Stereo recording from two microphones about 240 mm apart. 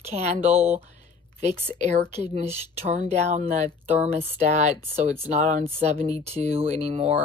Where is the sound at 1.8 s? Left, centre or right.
Right.